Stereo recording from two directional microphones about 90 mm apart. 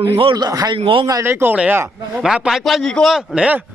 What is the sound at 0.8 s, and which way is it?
Speech, 75° right (ahead or behind).